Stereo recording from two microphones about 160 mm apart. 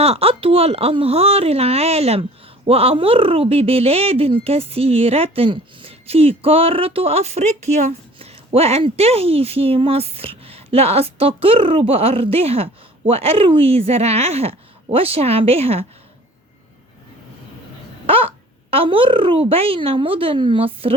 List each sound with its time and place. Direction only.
0.0 s speech: 40° right (ahead or behind)
18.0 s a sound: 35° right (ahead or behind)
18.7 s speech: 35° right (ahead or behind)